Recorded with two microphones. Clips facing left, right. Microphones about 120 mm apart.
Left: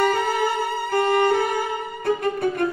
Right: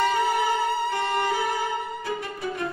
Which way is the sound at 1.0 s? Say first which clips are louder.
Left 6 dB; 60° left (ahead or behind).